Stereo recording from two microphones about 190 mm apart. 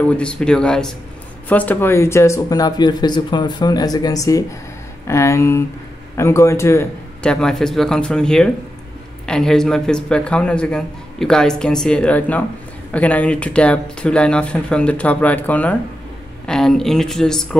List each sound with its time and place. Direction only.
0.2 s a man's voice: 5° left (ahead or behind)